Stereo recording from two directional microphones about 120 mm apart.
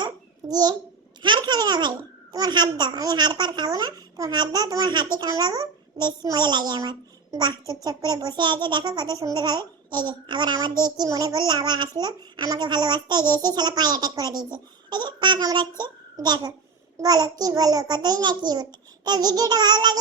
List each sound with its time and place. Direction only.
0.0 s babbling: 35° right (ahead or behind)
1.2 s a child's voice: 40° right (ahead or behind)